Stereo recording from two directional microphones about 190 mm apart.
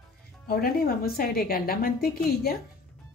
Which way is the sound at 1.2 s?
50° left (ahead or behind).